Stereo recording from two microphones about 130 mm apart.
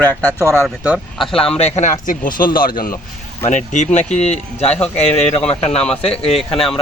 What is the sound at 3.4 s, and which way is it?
Speech, 70° left (ahead or behind).